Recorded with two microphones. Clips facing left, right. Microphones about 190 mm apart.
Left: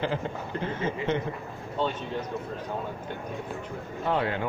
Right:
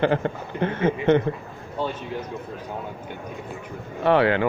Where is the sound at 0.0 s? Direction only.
65° right (ahead or behind).